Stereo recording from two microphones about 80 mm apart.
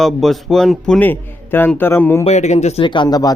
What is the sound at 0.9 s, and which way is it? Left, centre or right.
A man's voice, left.